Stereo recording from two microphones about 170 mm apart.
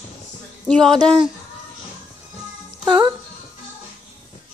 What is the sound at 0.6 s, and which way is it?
Speech, 5° left (ahead or behind).